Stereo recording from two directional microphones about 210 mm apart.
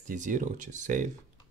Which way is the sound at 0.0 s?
35° right (ahead or behind).